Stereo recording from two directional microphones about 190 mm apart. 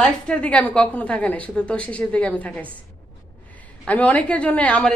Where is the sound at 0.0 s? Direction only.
5° left (ahead or behind).